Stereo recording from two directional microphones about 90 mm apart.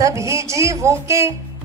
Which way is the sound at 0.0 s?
35° right (ahead or behind).